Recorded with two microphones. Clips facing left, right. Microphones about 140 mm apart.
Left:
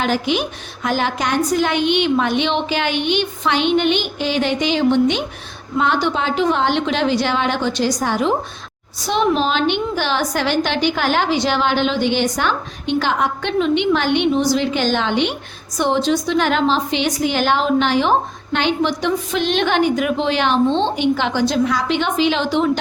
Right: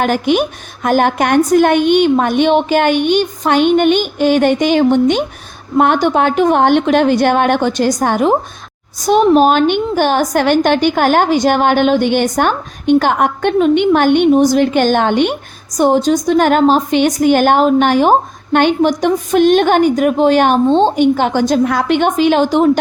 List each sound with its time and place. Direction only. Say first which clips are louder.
0.0 s a woman's voice: right 6 dB; 50° right (ahead or behind)